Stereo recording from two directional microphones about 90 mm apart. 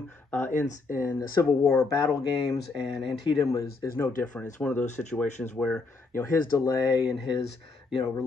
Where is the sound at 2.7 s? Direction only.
10° right (ahead or behind).